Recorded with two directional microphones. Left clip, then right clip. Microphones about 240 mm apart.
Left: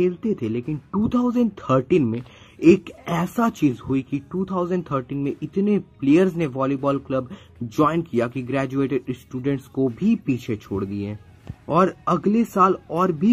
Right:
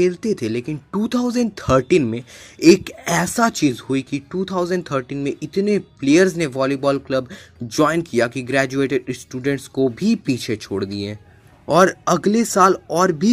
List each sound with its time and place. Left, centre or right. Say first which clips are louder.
0.0 s a woman's voice: right 4 dB; centre